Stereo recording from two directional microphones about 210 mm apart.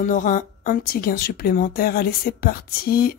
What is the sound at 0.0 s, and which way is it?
Speech, 35° left (ahead or behind).